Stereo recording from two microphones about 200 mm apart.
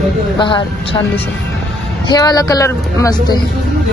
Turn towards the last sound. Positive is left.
turn(degrees=20)  # may be behind; listen again after turning